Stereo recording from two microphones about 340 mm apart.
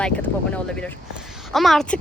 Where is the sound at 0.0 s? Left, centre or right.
Centre.